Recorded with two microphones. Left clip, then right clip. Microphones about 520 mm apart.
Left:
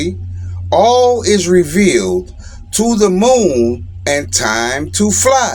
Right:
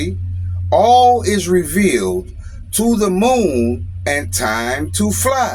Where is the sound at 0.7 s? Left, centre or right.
Right.